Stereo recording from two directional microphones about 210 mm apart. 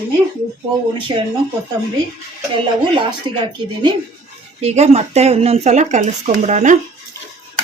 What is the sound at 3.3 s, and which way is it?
Speech, 25° right (ahead or behind).